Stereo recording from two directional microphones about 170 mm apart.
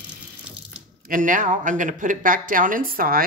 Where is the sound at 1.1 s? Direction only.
50° right (ahead or behind).